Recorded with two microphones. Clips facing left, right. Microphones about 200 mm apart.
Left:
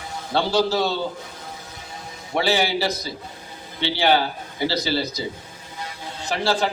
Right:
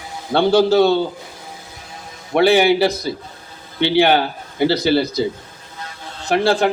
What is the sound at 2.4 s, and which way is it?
A man's voice, 60° right (ahead or behind).